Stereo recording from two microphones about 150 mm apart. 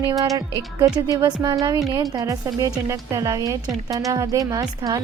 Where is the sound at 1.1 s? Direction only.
30° right (ahead or behind).